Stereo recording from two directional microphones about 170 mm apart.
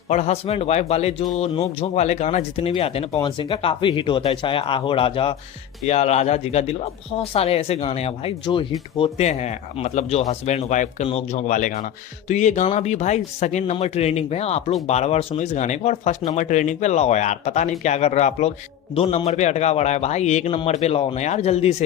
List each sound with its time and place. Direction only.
0.1 s speech: 40° left (ahead or behind)